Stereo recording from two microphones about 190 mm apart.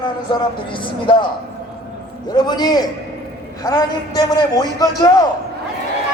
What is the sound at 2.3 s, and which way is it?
A man's voice, 20° left (ahead or behind).